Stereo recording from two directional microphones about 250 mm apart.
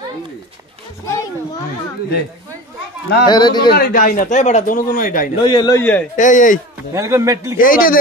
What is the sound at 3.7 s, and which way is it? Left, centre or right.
Speech, left.